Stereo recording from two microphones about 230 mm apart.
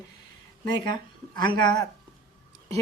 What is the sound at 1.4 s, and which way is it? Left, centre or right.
Speech, centre.